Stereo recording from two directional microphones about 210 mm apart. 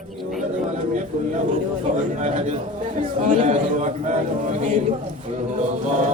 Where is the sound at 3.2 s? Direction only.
35° right (ahead or behind).